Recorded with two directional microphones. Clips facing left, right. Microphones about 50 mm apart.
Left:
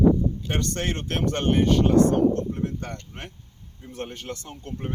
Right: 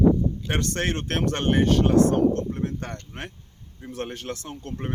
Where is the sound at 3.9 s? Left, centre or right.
Right.